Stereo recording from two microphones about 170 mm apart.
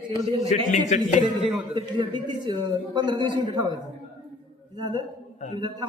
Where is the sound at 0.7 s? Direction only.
50° left (ahead or behind).